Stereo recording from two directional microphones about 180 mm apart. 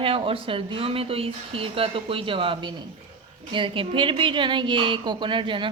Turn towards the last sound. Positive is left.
turn(degrees=-25)  # may be behind; listen again after turning